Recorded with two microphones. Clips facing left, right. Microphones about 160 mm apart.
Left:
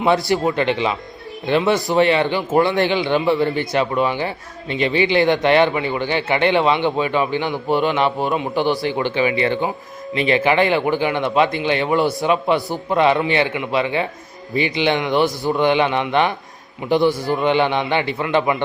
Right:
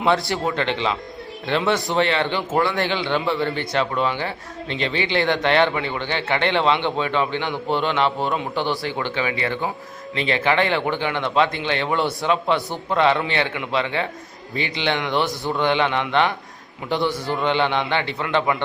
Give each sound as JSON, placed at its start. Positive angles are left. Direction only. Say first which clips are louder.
{"t": 0.0, "sound": "a man's voice", "louder": "left 4 dB", "side_deg": 15}
{"t": 2.0, "sound": "a man's voice", "louder": "left 5 dB", "side_deg": 15}